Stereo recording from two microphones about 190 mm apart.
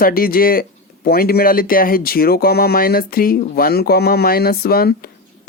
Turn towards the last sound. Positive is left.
turn(degrees=55)  # may be behind; listen again after turning